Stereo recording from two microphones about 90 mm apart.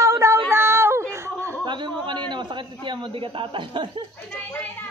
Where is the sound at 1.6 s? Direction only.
60° right (ahead or behind).